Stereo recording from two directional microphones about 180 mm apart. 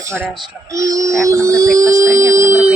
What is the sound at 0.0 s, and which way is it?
Speech, 15° right (ahead or behind).